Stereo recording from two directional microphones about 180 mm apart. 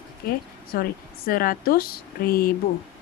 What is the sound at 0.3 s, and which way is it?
Speech, 55° left (ahead or behind).